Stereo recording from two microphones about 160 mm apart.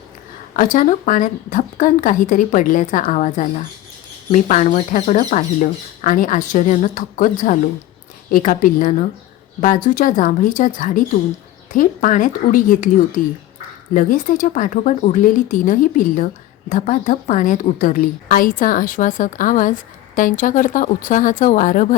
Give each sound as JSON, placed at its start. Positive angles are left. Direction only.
{"t": 0.5, "sound": "a woman's voice", "side_deg": 55}